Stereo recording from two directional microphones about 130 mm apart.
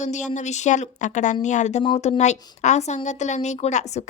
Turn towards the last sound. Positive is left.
turn(degrees=60)  # may be behind; listen again after turning